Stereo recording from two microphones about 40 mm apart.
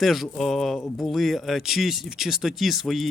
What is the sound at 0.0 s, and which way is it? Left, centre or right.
Speech, centre.